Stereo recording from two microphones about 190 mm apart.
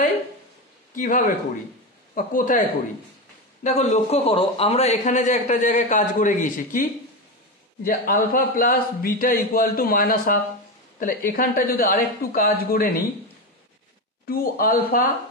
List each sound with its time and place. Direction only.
0.9 s a man's voice: 45° left (ahead or behind)
3.6 s a man's voice: 35° left (ahead or behind)
14.2 s a man's voice: 50° left (ahead or behind)